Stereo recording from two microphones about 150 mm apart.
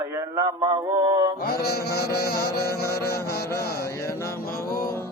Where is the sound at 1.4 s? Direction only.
90° left.